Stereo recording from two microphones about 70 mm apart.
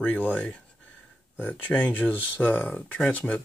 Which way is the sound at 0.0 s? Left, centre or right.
Left.